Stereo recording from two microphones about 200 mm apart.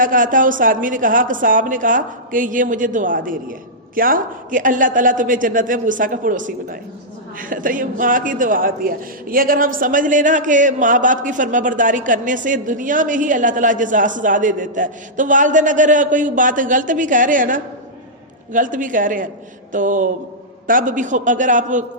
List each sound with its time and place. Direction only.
0.0 s a man's voice: 40° right (ahead or behind)